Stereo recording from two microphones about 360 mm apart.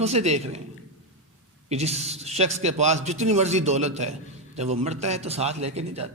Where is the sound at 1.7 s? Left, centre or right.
Centre.